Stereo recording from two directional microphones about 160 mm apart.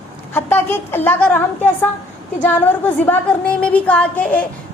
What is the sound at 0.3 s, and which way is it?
A woman's voice, 15° left (ahead or behind).